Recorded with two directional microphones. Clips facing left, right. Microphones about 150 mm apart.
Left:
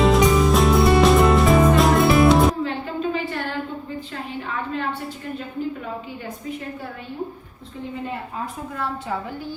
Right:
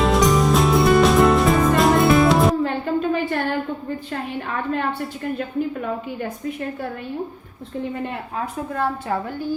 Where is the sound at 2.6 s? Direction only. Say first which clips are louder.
Right 4 dB; 50° right (ahead or behind).